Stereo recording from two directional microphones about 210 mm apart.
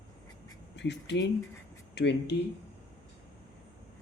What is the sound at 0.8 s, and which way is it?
Speech, 55° left (ahead or behind).